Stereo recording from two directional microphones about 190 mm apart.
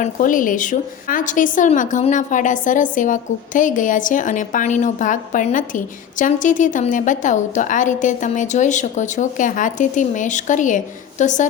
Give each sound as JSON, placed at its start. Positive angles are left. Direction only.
{"t": 0.0, "sound": "a woman's voice", "side_deg": 45}